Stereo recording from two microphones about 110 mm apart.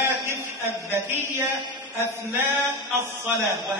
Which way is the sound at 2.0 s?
25° right (ahead or behind).